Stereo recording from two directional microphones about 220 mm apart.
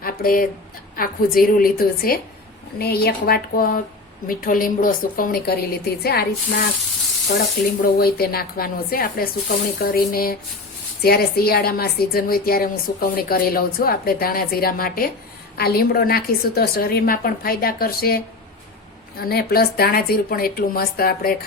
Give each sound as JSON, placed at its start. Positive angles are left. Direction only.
{"t": 0.0, "sound": "a sound", "side_deg": 40}
{"t": 0.9, "sound": "a woman's voice", "side_deg": 40}
{"t": 7.9, "sound": "a woman's voice", "side_deg": 45}
{"t": 19.2, "sound": "a woman's voice", "side_deg": 45}